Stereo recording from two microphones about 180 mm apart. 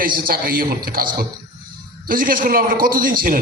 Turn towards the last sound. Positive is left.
turn(degrees=-50)  # may be behind; listen again after turning